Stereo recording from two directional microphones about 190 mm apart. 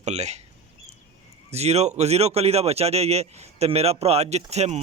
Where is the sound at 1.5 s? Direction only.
35° right (ahead or behind).